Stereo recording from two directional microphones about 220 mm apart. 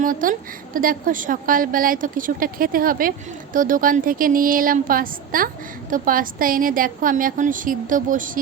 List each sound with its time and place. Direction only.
0.0 s a woman's voice: 40° right (ahead or behind)